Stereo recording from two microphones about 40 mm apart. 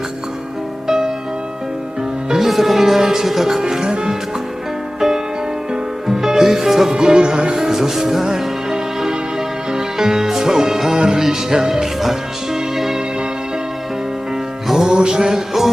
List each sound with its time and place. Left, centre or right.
0.9 s music: centre
2.3 s speech: centre
4.9 s music: centre
6.9 s music: right
14.7 s music: centre